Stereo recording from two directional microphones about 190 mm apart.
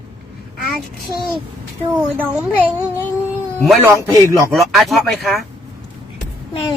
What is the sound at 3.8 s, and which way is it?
Speech, 15° right (ahead or behind).